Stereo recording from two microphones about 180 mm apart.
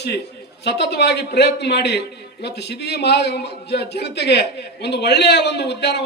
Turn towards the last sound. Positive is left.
turn(degrees=70)  # may be behind; listen again after turning